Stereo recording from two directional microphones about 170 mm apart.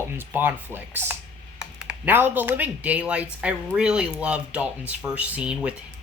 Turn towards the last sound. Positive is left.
turn(degrees=-5)  # may be behind; listen again after turning